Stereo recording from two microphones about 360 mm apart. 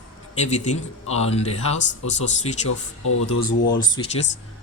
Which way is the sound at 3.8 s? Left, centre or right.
Centre.